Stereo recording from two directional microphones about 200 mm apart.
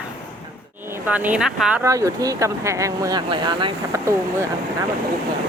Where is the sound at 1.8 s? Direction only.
15° right (ahead or behind).